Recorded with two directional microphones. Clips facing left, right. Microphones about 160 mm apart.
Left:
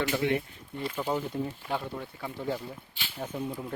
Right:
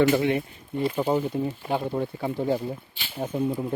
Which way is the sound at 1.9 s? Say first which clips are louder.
Right 10 dB; 35° right (ahead or behind).